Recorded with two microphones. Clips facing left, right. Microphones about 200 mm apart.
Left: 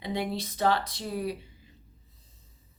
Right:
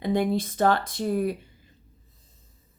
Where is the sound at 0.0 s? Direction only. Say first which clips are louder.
Right 7 dB; 50° right (ahead or behind).